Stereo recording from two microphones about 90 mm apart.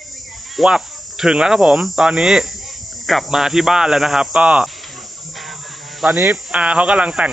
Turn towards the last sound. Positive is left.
turn(degrees=-5)  # may be behind; listen again after turning